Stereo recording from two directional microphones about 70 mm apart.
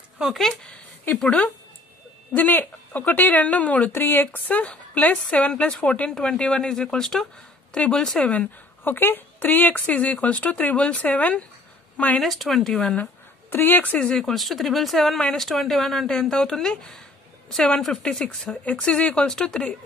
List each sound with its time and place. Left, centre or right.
2.3 s speech: left
3.9 s speech: left; by 8.3 s centre
8.8 s speech: left
12.2 s speech: centre
12.9 s speech: left
13.9 s speech: centre